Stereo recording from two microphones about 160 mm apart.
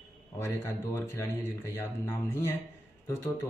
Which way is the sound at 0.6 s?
15° left (ahead or behind).